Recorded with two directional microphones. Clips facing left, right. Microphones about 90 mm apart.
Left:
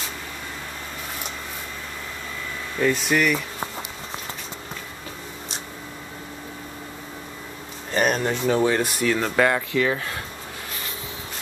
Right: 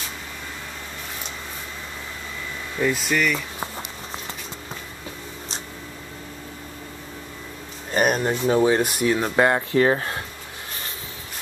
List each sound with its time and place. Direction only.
2.8 s speech: centre (ahead or behind)
7.9 s speech: 10° right (ahead or behind)
9.4 s speech: 30° right (ahead or behind)